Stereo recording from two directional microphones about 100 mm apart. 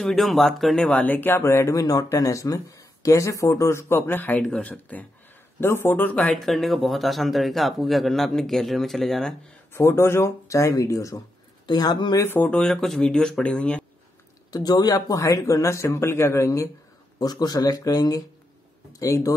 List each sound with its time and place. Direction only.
0.0 s speech: centre (ahead or behind); by 6.2 s 20° left (ahead or behind)
6.2 s speech: centre (ahead or behind)
9.8 s speech: 25° left (ahead or behind)
11.6 s speech: 45° left (ahead or behind)
12.2 s speech: 20° left (ahead or behind)
12.4 s speech: 5° left (ahead or behind)
14.5 s speech: 40° left (ahead or behind)
17.2 s speech: 40° left (ahead or behind)